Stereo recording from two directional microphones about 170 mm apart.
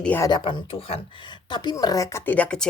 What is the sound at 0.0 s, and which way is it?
Speech, 10° left (ahead or behind).